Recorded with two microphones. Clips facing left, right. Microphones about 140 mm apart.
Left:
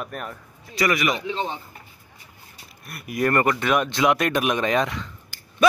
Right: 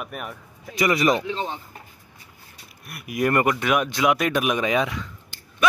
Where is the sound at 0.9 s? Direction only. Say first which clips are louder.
Right 4 dB; 35° right (ahead or behind).